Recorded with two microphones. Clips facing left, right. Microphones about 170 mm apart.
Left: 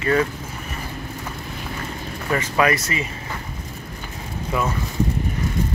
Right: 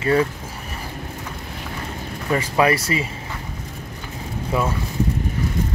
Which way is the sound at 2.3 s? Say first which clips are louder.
Right 2 dB; 30° right (ahead or behind).